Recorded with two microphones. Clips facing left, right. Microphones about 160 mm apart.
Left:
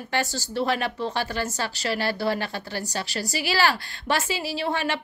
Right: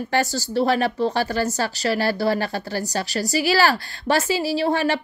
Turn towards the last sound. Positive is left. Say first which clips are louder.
# right 6 dB
turn(degrees=-40)  # may be behind; listen again after turning